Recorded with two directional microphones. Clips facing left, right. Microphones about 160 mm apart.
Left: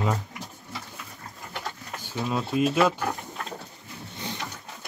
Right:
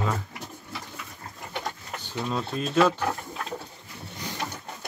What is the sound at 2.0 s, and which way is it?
Speech, 10° left (ahead or behind).